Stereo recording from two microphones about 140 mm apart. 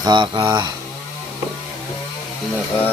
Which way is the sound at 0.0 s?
30° right (ahead or behind).